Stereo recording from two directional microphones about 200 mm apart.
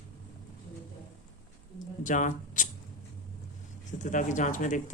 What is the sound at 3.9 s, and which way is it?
Speech, 40° left (ahead or behind).